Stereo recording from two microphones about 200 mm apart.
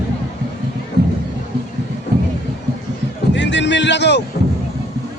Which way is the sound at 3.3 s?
65° left (ahead or behind).